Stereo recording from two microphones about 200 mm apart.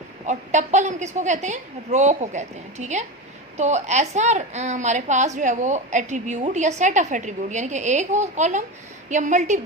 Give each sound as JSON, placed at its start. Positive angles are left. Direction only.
{"t": 0.3, "sound": "a woman's voice", "side_deg": -35}